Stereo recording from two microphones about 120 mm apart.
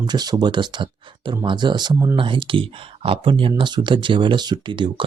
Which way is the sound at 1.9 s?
20° right (ahead or behind).